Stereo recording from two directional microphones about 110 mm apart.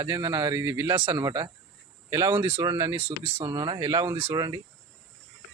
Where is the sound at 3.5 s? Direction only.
40° right (ahead or behind).